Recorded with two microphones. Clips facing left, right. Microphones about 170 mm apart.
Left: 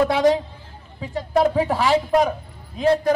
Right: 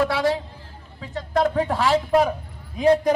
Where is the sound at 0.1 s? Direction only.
20° left (ahead or behind); by 2.3 s centre (ahead or behind).